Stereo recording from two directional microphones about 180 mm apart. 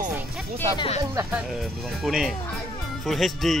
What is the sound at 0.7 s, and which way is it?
Speech, 30° left (ahead or behind).